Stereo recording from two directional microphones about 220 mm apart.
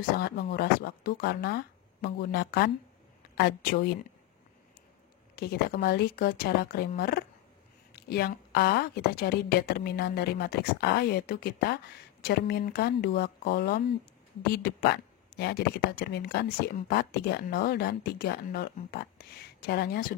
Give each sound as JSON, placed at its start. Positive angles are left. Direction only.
{"t": 0.2, "sound": "a woman's voice", "side_deg": 45}
{"t": 5.3, "sound": "a woman's voice", "side_deg": 45}